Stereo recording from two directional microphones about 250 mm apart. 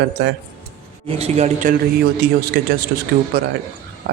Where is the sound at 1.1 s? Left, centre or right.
Right.